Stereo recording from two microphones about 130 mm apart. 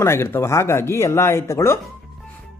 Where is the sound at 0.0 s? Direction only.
20° left (ahead or behind).